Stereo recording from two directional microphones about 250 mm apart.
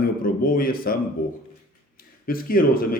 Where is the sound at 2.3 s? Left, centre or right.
Left.